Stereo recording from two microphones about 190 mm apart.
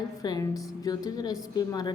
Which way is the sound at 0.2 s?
20° left (ahead or behind).